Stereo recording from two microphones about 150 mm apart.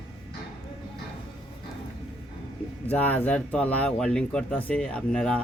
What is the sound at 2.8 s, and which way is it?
Speech, 10° left (ahead or behind).